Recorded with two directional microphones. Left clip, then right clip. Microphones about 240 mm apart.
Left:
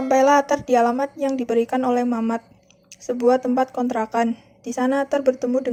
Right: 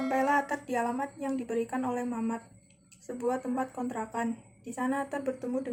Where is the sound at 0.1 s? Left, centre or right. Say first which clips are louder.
Left 13 dB; left.